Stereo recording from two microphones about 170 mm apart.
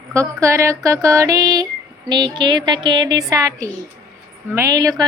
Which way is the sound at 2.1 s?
25° right (ahead or behind).